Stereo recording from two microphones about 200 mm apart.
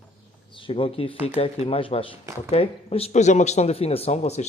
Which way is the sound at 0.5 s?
25° left (ahead or behind).